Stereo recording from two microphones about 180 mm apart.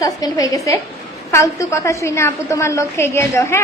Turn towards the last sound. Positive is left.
turn(degrees=15)  # may be behind; listen again after turning